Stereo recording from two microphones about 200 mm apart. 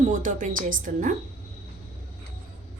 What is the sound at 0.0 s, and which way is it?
A woman's voice, 40° right (ahead or behind).